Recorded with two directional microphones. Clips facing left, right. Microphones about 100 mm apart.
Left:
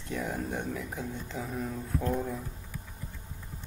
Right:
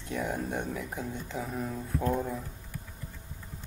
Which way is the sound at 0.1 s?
Centre (ahead or behind).